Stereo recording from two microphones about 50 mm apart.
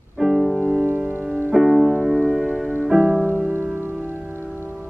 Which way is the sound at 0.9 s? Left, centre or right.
Right.